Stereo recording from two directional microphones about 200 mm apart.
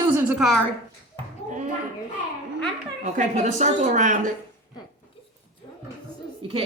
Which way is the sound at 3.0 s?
40° right (ahead or behind).